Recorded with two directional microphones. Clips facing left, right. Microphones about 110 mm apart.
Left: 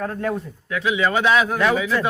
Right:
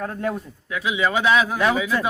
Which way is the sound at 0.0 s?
20° right (ahead or behind).